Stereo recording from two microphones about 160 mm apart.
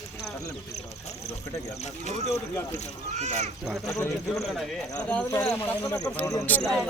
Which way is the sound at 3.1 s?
45° right (ahead or behind).